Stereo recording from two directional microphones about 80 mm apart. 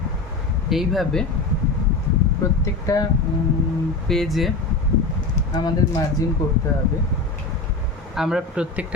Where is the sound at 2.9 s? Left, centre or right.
Left.